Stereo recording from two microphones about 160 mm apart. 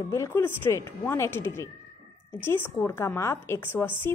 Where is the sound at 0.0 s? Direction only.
20° left (ahead or behind).